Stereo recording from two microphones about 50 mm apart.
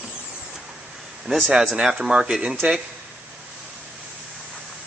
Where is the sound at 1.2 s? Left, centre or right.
Centre.